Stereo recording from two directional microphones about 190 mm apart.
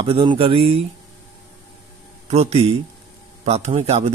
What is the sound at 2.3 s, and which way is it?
Speech, 35° right (ahead or behind).